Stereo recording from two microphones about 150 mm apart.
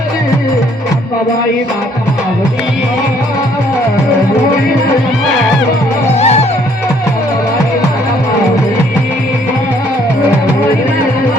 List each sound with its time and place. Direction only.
6.1 s music: 45° left (ahead or behind)